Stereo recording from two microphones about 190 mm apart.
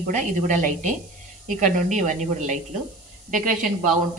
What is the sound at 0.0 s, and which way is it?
A woman's voice, 40° right (ahead or behind).